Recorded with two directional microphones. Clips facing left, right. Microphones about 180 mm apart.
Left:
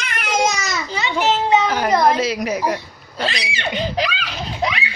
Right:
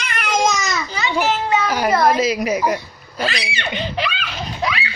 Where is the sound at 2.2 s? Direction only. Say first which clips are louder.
Right 2 dB; 10° right (ahead or behind).